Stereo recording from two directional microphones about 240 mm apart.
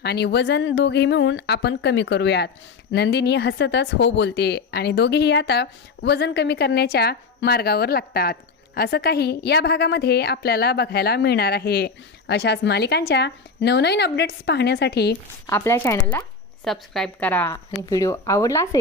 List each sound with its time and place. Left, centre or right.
0.0 s a woman's voice: left
15.4 s speech: centre